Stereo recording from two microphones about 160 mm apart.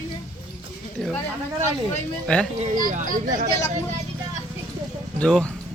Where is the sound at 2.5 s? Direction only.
55° right (ahead or behind).